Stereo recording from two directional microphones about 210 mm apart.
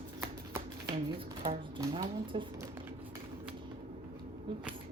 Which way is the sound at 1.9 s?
25° right (ahead or behind).